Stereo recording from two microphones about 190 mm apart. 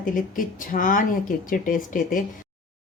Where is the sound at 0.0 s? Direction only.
45° left (ahead or behind).